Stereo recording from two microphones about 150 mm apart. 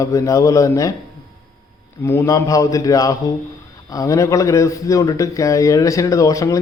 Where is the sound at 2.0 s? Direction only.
15° left (ahead or behind).